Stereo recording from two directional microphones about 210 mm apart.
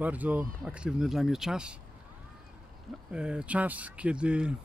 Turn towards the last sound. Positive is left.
turn(degrees=-5)  # may be behind; listen again after turning